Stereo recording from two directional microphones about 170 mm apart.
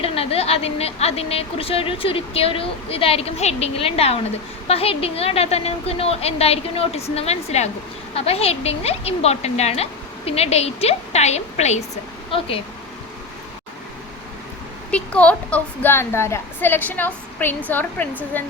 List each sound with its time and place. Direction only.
0.0 s a woman's voice: 35° left (ahead or behind)
14.8 s a woman's voice: 5° left (ahead or behind)